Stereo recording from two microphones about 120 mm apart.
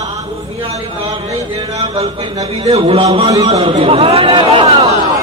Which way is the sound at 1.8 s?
50° right (ahead or behind).